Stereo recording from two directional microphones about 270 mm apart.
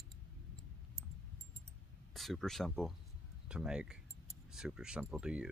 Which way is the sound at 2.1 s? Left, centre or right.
Centre.